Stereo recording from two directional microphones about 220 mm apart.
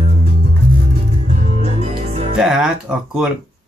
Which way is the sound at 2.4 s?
5° right (ahead or behind).